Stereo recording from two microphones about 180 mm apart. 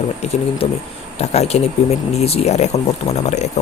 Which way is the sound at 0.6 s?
35° left (ahead or behind).